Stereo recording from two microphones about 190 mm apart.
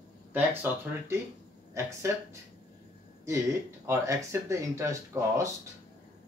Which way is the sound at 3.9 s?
15° right (ahead or behind).